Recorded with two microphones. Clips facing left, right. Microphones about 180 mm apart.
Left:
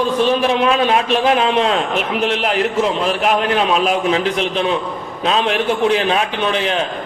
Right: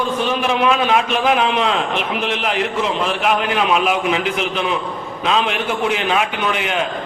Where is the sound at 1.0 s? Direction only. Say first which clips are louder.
Left 2 dB; 35° left (ahead or behind).